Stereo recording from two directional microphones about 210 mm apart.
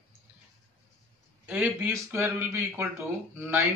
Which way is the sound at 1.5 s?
5° right (ahead or behind).